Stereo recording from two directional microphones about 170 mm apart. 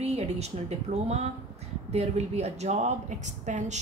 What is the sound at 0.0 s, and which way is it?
A woman's voice, 40° right (ahead or behind).